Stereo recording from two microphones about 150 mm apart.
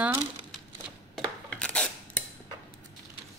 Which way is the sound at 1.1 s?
5° left (ahead or behind).